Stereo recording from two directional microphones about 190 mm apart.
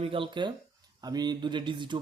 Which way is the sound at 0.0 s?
30° right (ahead or behind).